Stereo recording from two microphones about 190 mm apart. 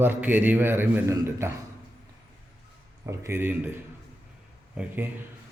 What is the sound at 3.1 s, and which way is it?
Speech, 15° right (ahead or behind).